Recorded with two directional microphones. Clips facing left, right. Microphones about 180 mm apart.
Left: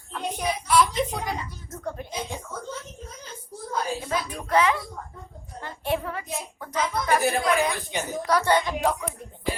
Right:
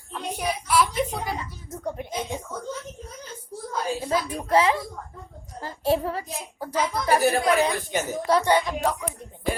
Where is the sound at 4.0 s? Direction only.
30° right (ahead or behind).